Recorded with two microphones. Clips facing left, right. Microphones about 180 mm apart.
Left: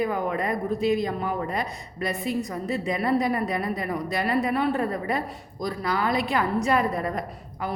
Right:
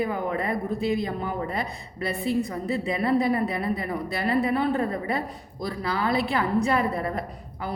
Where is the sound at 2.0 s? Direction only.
30° right (ahead or behind).